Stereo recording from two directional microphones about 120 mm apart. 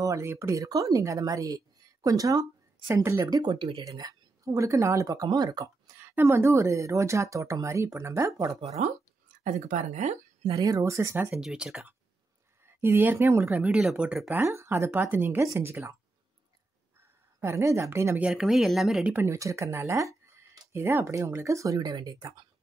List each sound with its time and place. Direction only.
0.0 s speech: 25° right (ahead or behind)
3.3 s speech: 35° right (ahead or behind)
3.8 s speech: 30° right (ahead or behind)
5.9 s speech: 20° right (ahead or behind)
8.6 s speech: 65° right (ahead or behind)
9.4 s speech: 90° right
10.5 s speech: 30° right (ahead or behind)
11.2 s speech: 5° right (ahead or behind)
12.6 s speech: 20° right (ahead or behind)
13.7 s speech: 5° right (ahead or behind)
14.3 s speech: 25° right (ahead or behind)
17.4 s speech: 25° right (ahead or behind)
18.2 s speech: 5° right (ahead or behind)
19.1 s speech: 25° right (ahead or behind)